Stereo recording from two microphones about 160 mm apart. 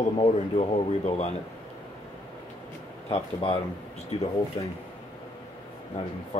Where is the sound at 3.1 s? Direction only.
35° left (ahead or behind).